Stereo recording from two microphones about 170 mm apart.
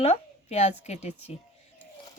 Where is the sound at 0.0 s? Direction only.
40° left (ahead or behind).